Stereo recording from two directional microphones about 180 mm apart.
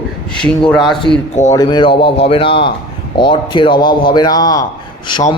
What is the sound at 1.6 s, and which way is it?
A man's voice, 30° left (ahead or behind).